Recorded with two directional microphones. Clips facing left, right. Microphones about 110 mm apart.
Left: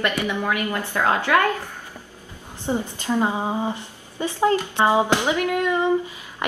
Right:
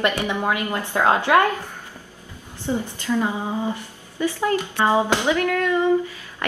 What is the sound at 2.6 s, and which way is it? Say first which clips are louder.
A woman's voice: even; 20° left (ahead or behind).